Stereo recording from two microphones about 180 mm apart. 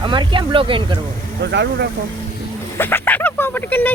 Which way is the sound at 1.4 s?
70° right (ahead or behind).